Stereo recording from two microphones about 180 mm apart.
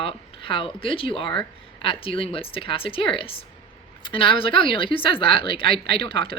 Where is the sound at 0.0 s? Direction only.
30° left (ahead or behind).